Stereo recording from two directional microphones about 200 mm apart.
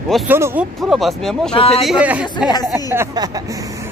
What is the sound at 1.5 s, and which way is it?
Speech, 30° left (ahead or behind).